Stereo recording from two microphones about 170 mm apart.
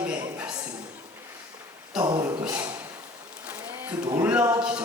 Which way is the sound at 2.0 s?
20° right (ahead or behind).